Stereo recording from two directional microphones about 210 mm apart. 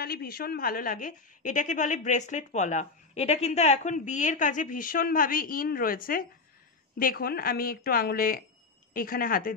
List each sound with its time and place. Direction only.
0.0 s a woman's voice: 45° left (ahead or behind)